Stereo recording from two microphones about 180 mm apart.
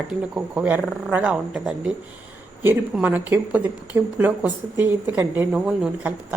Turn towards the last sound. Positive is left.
turn(degrees=-5)  # may be behind; listen again after turning